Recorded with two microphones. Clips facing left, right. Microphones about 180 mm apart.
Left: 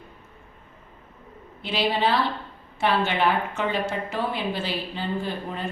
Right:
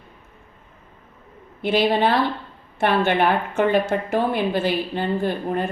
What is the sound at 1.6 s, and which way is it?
A woman's voice, 55° right (ahead or behind).